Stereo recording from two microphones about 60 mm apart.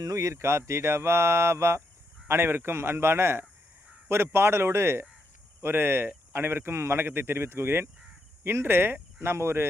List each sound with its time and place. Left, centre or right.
0.0 s mantra: right
5.6 s a man's voice: right